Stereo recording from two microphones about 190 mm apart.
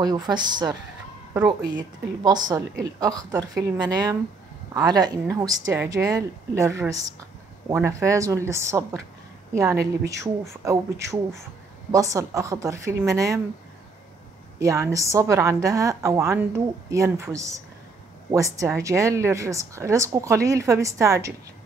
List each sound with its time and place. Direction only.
0.0 s a woman's voice: 20° right (ahead or behind)
14.6 s a woman's voice: 15° right (ahead or behind)